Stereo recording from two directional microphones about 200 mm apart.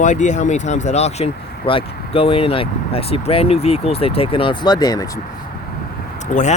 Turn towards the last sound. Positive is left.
turn(degrees=40)  # may be behind; listen again after turning